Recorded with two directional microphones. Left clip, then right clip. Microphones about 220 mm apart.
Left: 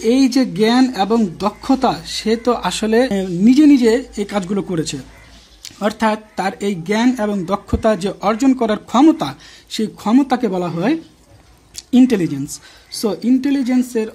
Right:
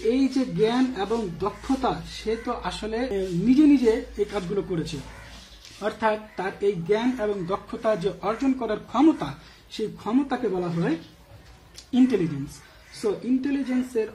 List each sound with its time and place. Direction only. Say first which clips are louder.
0.1 s speech: left 13 dB; 50° left (ahead or behind)
11.7 s a sound: left 8 dB; 45° left (ahead or behind)
13.0 s speech: left 8 dB; 50° left (ahead or behind)